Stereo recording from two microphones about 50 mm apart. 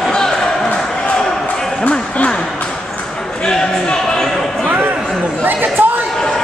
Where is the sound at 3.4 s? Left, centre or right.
Centre.